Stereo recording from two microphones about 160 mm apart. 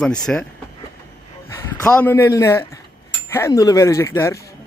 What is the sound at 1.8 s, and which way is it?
Speech, 10° left (ahead or behind).